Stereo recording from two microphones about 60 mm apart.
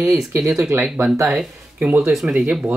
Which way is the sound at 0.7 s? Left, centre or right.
Right.